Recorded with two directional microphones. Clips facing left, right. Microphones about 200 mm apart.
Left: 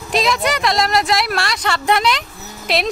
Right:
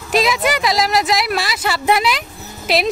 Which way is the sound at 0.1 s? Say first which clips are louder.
Right 1 dB; 5° right (ahead or behind).